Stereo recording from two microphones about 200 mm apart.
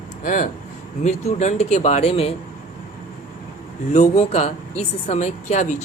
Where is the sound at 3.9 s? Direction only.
35° left (ahead or behind).